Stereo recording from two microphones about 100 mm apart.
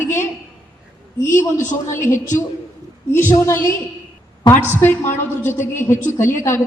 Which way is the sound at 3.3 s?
30° left (ahead or behind).